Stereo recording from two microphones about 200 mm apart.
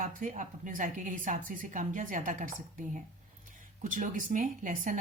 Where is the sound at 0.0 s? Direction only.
40° right (ahead or behind).